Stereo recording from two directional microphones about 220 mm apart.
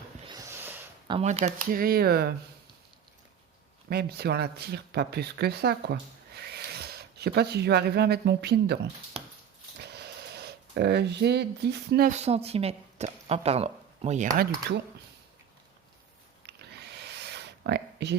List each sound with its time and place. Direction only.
0.3 s snort: 15° right (ahead or behind)
1.0 s speech: 25° right (ahead or behind); by 2.3 s 45° right (ahead or behind)
3.8 s speech: 45° right (ahead or behind); by 14.3 s 30° right (ahead or behind)
16.5 s a sound: 50° right (ahead or behind)